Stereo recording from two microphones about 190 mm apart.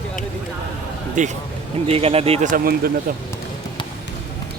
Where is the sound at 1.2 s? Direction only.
40° right (ahead or behind).